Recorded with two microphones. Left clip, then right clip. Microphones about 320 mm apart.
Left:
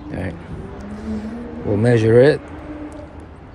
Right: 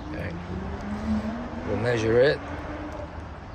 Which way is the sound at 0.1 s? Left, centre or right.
Left.